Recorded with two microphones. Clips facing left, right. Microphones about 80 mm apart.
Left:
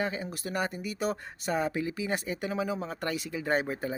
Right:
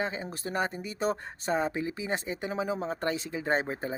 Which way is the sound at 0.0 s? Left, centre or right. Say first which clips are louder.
Even; right.